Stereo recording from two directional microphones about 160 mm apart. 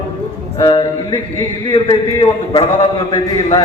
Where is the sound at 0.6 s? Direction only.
30° left (ahead or behind).